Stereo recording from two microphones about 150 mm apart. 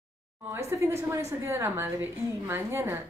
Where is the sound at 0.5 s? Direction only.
20° right (ahead or behind).